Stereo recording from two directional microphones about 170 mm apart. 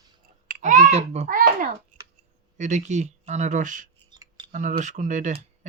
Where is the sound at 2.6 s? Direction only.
45° right (ahead or behind).